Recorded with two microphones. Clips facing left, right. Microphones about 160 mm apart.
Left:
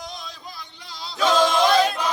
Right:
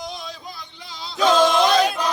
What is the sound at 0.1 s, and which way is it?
Music, centre (ahead or behind).